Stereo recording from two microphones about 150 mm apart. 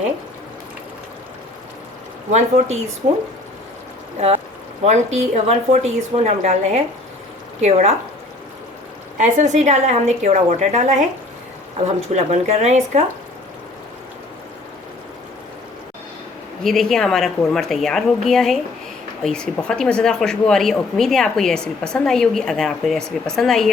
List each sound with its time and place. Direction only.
3.0 s a woman's voice: 45° right (ahead or behind)
4.8 s a woman's voice: 50° right (ahead or behind)
9.1 s a woman's voice: 55° right (ahead or behind)
12.1 s a woman's voice: 50° right (ahead or behind)
16.6 s speech: centre (ahead or behind)